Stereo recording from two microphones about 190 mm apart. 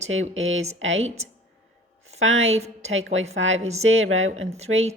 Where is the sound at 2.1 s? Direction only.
90° right.